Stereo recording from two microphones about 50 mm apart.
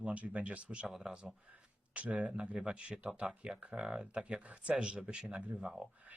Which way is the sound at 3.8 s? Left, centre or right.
Centre.